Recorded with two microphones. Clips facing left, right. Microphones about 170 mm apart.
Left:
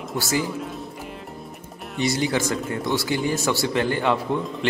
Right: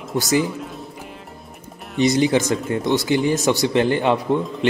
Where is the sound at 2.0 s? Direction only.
20° right (ahead or behind).